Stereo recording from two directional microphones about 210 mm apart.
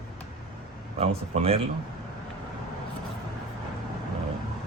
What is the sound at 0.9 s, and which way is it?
Speech, 30° right (ahead or behind).